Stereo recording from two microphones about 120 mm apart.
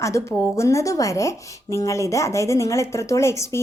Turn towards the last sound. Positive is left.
turn(degrees=25)  # may be behind; listen again after turning